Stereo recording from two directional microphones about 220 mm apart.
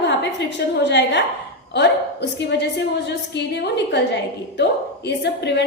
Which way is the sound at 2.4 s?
50° left (ahead or behind).